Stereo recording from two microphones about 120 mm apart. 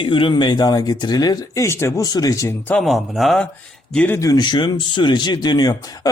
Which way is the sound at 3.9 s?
15° left (ahead or behind).